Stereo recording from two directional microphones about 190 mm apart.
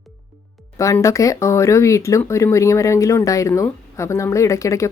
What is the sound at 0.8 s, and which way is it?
Speech, 15° left (ahead or behind).